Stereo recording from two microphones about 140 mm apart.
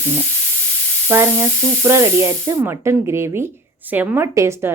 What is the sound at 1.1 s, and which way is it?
A woman's voice, 20° right (ahead or behind).